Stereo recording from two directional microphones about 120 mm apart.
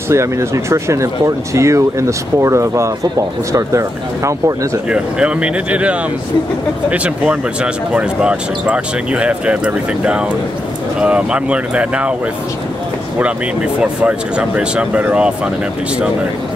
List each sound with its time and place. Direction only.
0.1 s speech: 25° right (ahead or behind)
4.8 s speech: 10° right (ahead or behind)
13.7 s speech: 10° right (ahead or behind)